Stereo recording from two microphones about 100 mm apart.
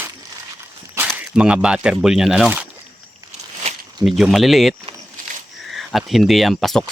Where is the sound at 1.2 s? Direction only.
10° right (ahead or behind).